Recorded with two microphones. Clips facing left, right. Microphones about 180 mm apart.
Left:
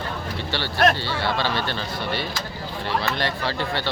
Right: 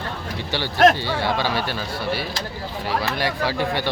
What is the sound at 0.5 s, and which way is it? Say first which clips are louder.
Speech: right 4 dB; 15° right (ahead or behind).